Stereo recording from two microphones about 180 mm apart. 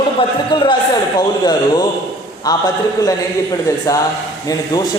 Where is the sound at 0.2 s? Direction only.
30° left (ahead or behind).